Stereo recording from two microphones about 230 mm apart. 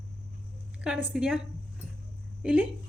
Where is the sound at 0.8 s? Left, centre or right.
Centre.